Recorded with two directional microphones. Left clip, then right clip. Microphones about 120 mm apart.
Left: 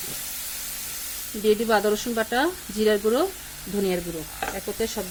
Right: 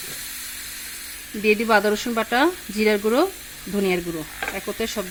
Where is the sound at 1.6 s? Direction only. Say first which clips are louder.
Right 3 dB; 55° right (ahead or behind).